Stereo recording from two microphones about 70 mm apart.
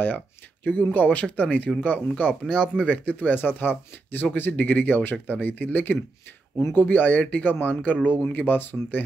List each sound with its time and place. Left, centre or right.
0.7 s speech: left
2.4 s speech: centre; by 9.0 s left